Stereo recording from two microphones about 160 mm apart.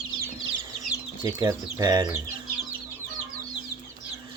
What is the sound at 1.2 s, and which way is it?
Speech, 20° right (ahead or behind).